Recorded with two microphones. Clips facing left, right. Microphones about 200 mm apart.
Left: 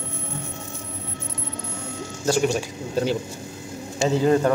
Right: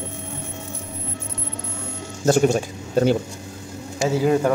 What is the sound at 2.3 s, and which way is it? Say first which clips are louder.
Speech: right 4 dB; 50° right (ahead or behind).